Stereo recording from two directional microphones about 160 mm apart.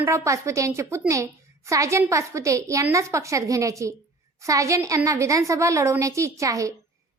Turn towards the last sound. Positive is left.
turn(degrees=-20)  # may be behind; listen again after turning